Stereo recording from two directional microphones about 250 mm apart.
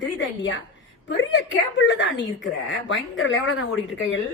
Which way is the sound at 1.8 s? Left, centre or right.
Left.